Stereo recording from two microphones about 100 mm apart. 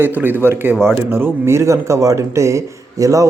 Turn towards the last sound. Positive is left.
turn(degrees=-35)  # may be behind; listen again after turning